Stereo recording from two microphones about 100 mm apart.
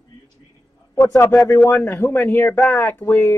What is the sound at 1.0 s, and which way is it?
A man's voice, 25° left (ahead or behind).